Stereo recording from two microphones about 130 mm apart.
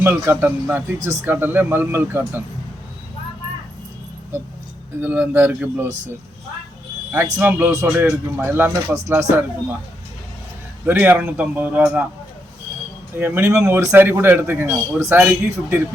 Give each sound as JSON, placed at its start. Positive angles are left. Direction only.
{"t": 0.0, "sound": "a man's voice", "side_deg": -15}
{"t": 4.9, "sound": "a man's voice", "side_deg": -15}
{"t": 7.1, "sound": "a man's voice", "side_deg": -15}
{"t": 10.8, "sound": "a man's voice", "side_deg": -15}
{"t": 13.1, "sound": "a man's voice", "side_deg": -15}